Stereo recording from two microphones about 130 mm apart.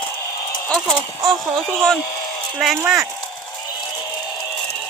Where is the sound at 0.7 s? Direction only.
5° left (ahead or behind).